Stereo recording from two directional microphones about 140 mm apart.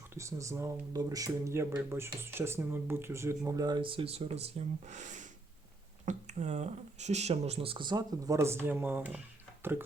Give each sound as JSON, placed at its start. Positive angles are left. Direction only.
{"t": 0.1, "sound": "speech", "side_deg": -20}